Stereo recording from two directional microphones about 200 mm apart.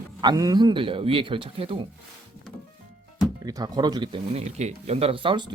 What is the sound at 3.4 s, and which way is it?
Speech, 20° right (ahead or behind).